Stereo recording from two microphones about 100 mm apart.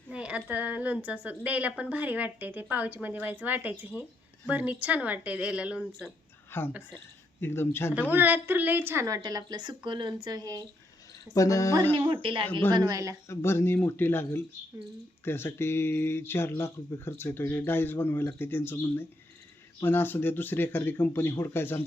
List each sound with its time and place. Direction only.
0.1 s speech: 10° right (ahead or behind)
6.5 s speech: 20° left (ahead or behind)
8.1 s a woman's voice: 20° right (ahead or behind)
9.0 s speech: 35° right (ahead or behind)
11.3 s a woman's voice: 30° left (ahead or behind)
11.9 s speech: 55° right (ahead or behind)
12.7 s speech: 40° right (ahead or behind)
13.2 s speech: 25° left (ahead or behind)